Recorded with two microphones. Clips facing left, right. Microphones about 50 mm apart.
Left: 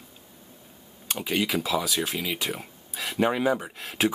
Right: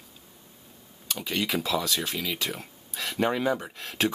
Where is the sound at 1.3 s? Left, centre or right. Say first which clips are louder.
Left 2 dB; centre.